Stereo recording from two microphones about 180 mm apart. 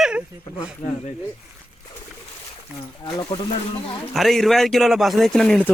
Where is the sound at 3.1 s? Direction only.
25° left (ahead or behind).